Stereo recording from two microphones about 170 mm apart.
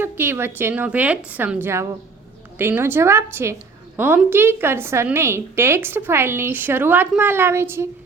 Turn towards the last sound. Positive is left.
turn(degrees=-15)  # may be behind; listen again after turning